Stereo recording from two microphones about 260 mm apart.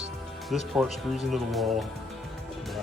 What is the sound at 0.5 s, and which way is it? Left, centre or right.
Speech, centre.